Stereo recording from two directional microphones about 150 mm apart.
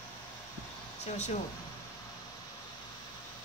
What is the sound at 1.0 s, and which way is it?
Speech, 50° left (ahead or behind).